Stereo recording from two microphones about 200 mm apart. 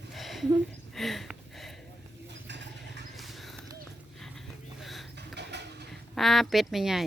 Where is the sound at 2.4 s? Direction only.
60° right (ahead or behind).